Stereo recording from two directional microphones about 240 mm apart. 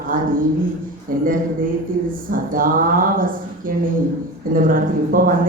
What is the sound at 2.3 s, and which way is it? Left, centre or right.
Speech, right.